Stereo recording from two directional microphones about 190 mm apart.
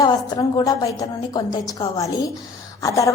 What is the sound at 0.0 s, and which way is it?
A woman's voice, 20° left (ahead or behind).